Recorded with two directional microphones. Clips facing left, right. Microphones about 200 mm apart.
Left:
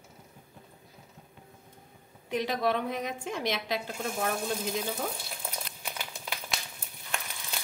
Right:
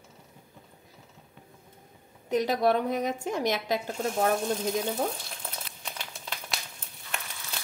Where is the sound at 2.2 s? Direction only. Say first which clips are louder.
Right 4 dB; 45° right (ahead or behind).